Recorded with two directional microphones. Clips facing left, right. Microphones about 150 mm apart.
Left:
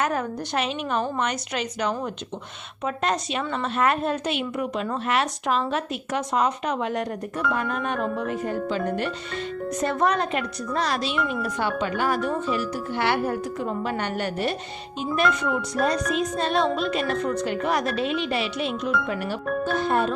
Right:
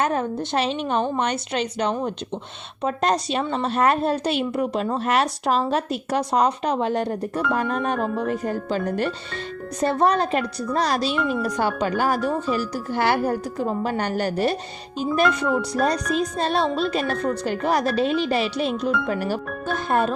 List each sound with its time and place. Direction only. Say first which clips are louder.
0.0 s a woman's voice: right 3 dB; 25° right (ahead or behind)
11.2 s speech: right 3 dB; centre (ahead or behind)
11.4 s a woman's voice: right 3 dB; 40° right (ahead or behind)
19.9 s speech: right 4 dB; 50° right (ahead or behind)